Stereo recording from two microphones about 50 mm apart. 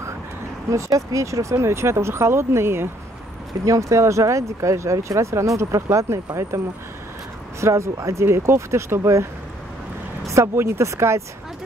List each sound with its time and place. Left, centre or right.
0.7 s speech: right
3.6 s speech: right
7.6 s speech: right
10.3 s speech: right